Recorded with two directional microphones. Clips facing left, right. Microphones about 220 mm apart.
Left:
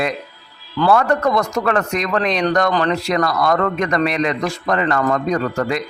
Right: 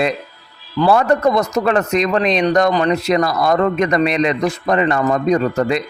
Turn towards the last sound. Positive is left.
turn(degrees=-20)  # may be behind; listen again after turning